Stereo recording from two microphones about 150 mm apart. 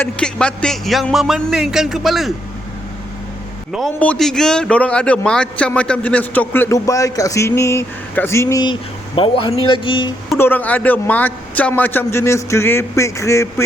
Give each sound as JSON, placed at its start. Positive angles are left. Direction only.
{"t": 0.0, "sound": "speech", "side_deg": 5}
{"t": 3.7, "sound": "a man's voice", "side_deg": 0}
{"t": 8.6, "sound": "speech", "side_deg": 35}
{"t": 10.3, "sound": "a man's voice", "side_deg": 15}